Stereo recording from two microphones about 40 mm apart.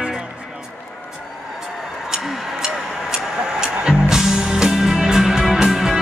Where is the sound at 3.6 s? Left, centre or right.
Centre.